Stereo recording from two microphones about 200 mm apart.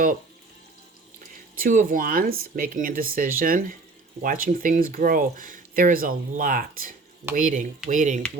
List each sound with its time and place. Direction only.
1.5 s speech: 40° right (ahead or behind)